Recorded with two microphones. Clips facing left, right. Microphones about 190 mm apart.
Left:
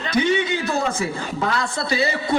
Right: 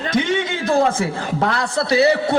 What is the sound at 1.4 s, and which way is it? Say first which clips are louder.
Speech: right 3 dB; 70° right (ahead or behind).